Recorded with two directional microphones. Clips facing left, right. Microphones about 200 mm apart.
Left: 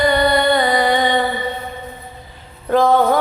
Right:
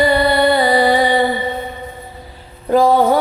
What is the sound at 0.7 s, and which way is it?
Music, 30° right (ahead or behind).